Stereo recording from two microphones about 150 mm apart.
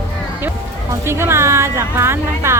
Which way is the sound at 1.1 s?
15° right (ahead or behind).